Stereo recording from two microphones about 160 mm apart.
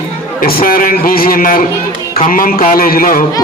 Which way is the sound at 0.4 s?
65° left (ahead or behind).